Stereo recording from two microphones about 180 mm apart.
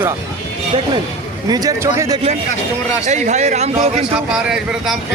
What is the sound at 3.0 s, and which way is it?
Speech, 40° right (ahead or behind).